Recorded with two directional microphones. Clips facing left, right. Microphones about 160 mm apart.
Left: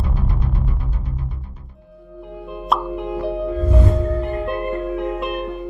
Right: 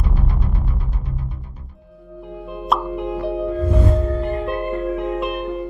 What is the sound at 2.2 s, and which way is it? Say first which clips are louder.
Plop: right 1 dB; centre (ahead or behind).